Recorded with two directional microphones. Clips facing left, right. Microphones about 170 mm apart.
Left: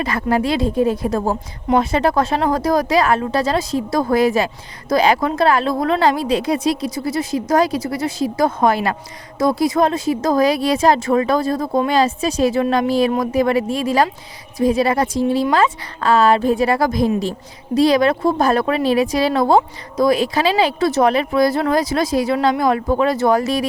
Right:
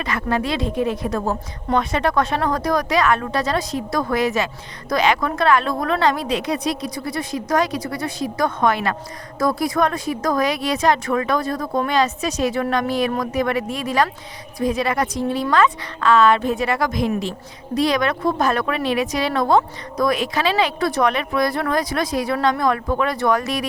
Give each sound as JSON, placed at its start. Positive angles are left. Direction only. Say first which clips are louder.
{"t": 0.0, "sound": "a woman's voice", "louder": "left 4 dB", "side_deg": 35}